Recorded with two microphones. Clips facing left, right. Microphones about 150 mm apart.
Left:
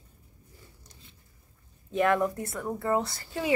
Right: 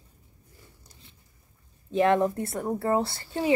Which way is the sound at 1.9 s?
25° right (ahead or behind).